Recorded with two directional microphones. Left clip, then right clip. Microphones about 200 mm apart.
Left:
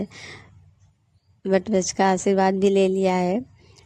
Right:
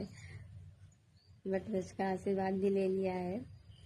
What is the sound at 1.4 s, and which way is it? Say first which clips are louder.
Speech: left 16 dB; 45° left (ahead or behind).